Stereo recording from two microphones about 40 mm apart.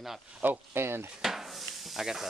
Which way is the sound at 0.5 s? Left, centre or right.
Right.